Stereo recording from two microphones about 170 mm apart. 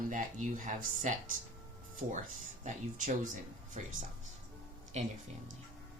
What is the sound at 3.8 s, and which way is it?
Speech, 40° right (ahead or behind).